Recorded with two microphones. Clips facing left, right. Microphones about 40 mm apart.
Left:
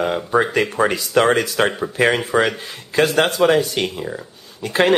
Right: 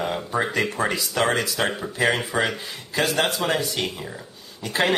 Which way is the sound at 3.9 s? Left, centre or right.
Centre.